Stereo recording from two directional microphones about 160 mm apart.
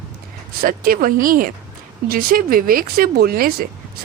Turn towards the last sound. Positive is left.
turn(degrees=-70)  # may be behind; listen again after turning